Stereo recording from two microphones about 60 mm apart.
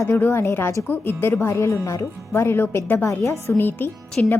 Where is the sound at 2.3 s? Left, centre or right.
Left.